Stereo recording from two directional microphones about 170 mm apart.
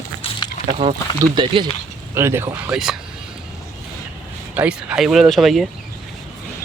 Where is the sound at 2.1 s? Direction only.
15° right (ahead or behind).